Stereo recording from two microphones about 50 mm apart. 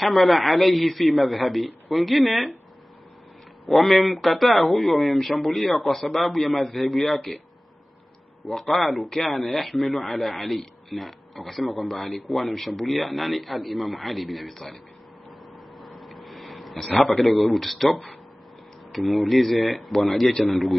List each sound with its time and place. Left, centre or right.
0.0 s speech: centre
3.6 s speech: centre
8.5 s speech: centre
15.8 s a sound: centre
17.0 s speech: centre